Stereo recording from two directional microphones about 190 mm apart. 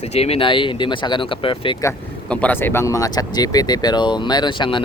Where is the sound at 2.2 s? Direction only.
5° left (ahead or behind); by 4.8 s 25° left (ahead or behind).